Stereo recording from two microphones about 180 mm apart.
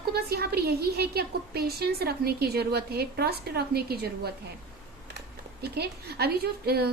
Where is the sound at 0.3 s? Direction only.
60° right (ahead or behind).